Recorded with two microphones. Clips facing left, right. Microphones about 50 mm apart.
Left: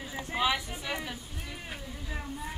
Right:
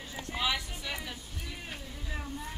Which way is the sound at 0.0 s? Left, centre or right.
Centre.